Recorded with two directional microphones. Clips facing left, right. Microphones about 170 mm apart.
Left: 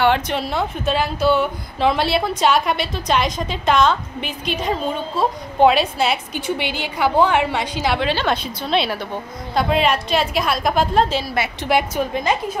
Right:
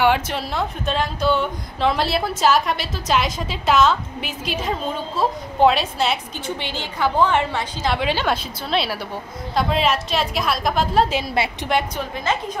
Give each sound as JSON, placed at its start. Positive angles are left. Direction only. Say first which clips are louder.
{"t": 0.0, "sound": "speech", "louder": "left 1 dB", "side_deg": -5}
{"t": 6.3, "sound": "a woman's voice", "louder": "left 4 dB", "side_deg": 15}
{"t": 8.0, "sound": "a woman's voice", "louder": "left 1 dB", "side_deg": -10}
{"t": 11.1, "sound": "a woman's voice", "louder": "even", "side_deg": -20}
{"t": 12.1, "sound": "a woman's voice", "louder": "left 3 dB", "side_deg": 15}